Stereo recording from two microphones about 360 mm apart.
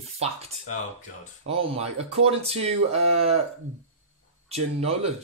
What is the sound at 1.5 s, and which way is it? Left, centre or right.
Speech, centre.